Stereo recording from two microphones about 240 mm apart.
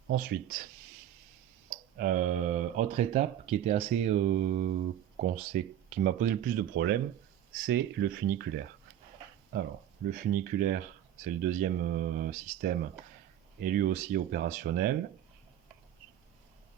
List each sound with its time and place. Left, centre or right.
0.1 s speech: right
2.0 s speech: right